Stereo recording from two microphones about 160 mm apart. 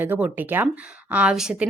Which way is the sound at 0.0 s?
10° right (ahead or behind).